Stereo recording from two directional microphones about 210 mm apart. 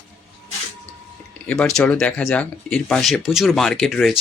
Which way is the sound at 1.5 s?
5° left (ahead or behind).